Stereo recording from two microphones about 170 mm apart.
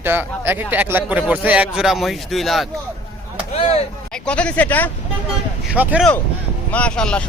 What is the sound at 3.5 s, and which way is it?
Speech, 35° left (ahead or behind).